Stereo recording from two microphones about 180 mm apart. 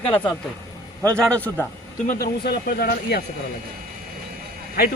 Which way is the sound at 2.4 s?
60° left (ahead or behind).